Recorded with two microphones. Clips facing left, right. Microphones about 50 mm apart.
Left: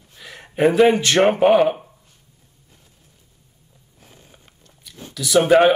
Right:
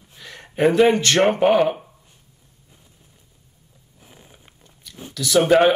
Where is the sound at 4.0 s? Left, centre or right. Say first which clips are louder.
Right 1 dB; centre.